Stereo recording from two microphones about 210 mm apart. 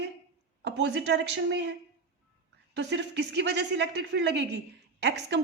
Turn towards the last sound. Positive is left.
turn(degrees=-55)  # may be behind; listen again after turning